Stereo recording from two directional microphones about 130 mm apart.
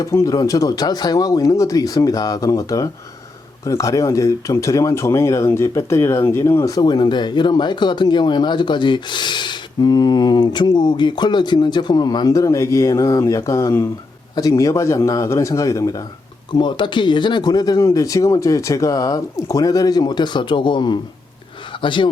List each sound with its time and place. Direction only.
0.0 s speech: 25° left (ahead or behind)
16.5 s a man's voice: 35° left (ahead or behind)